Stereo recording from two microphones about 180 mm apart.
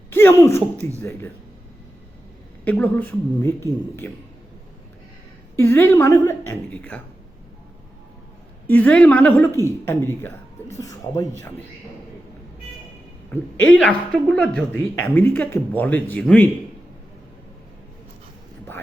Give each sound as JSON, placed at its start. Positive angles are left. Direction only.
{"t": 0.1, "sound": "a woman's voice", "side_deg": 10}
{"t": 2.6, "sound": "a woman's voice", "side_deg": 10}
{"t": 5.5, "sound": "a woman's voice", "side_deg": 10}
{"t": 8.6, "sound": "a woman's voice", "side_deg": 10}
{"t": 13.3, "sound": "a woman's voice", "side_deg": 10}